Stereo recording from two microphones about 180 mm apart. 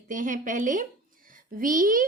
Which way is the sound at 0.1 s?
45° right (ahead or behind).